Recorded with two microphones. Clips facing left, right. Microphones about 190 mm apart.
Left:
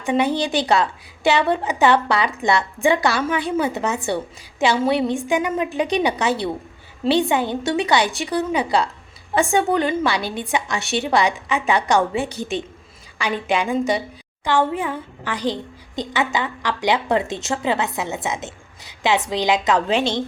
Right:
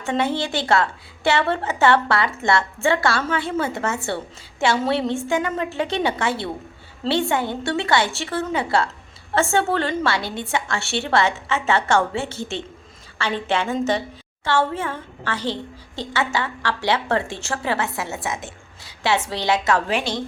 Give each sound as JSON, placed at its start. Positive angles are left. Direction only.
{"t": 0.0, "sound": "a woman's voice", "side_deg": 15}